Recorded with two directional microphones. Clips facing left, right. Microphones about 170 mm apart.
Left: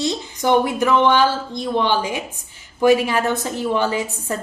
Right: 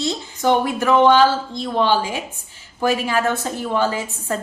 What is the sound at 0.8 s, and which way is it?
Speech, 15° right (ahead or behind).